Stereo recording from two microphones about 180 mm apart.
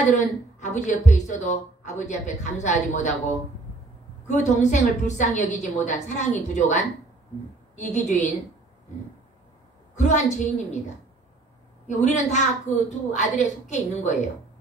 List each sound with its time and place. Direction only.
0.0 s speech: 40° left (ahead or behind)
4.3 s speech: 40° left (ahead or behind)
9.9 s speech: 40° left (ahead or behind)
11.9 s speech: 40° left (ahead or behind)